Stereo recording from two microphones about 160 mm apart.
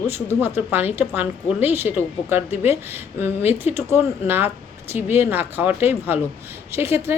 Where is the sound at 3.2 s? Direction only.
15° right (ahead or behind).